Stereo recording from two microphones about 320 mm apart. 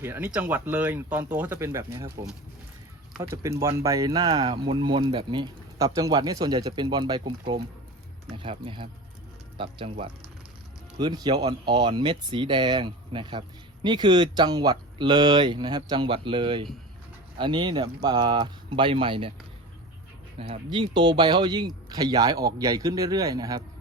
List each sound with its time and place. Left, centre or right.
0.0 s speech: centre
3.2 s speech: centre
20.4 s speech: centre